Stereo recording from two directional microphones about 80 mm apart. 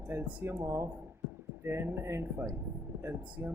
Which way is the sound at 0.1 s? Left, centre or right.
Right.